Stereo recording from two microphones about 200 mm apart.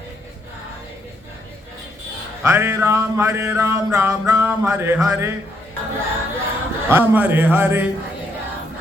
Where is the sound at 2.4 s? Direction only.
10° right (ahead or behind).